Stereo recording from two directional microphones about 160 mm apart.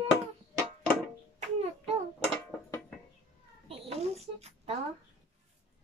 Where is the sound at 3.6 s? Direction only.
35° right (ahead or behind).